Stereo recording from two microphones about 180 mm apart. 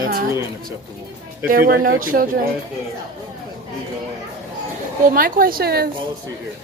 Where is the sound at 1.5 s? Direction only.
55° right (ahead or behind).